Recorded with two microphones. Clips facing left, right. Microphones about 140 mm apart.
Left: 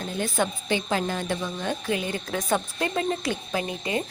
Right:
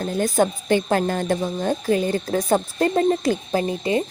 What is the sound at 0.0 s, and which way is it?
Speech, 40° right (ahead or behind).